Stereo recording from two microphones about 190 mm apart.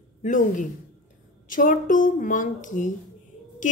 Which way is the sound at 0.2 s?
40° left (ahead or behind).